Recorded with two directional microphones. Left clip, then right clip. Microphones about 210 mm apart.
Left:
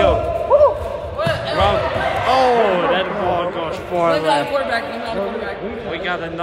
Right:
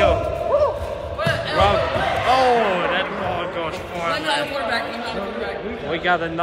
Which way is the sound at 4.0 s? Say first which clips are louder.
Left 6 dB; 25° left (ahead or behind).